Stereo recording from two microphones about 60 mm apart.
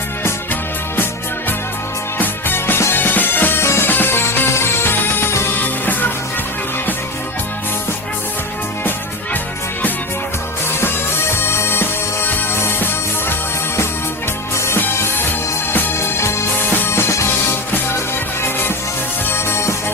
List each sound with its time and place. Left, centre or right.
2.1 s music: left
5.5 s music: left
10.8 s music: left
14.8 s music: left
19.3 s music: left